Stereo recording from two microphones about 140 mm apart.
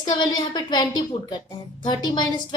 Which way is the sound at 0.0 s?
30° left (ahead or behind).